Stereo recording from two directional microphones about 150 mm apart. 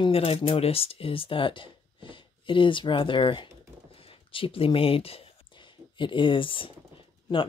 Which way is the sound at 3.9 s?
35° left (ahead or behind).